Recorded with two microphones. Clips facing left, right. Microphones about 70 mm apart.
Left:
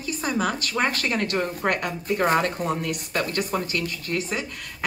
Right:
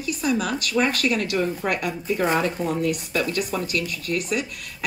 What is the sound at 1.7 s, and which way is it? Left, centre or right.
A woman's voice, left.